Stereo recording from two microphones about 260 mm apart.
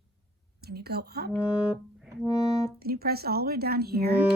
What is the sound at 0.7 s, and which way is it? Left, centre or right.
Speech, right.